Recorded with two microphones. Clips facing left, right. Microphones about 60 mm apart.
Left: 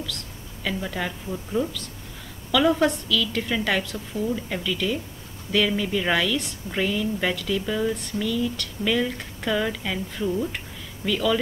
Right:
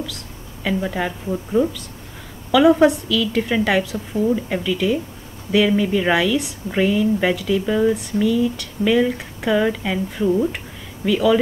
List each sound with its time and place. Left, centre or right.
0.7 s a woman's voice: centre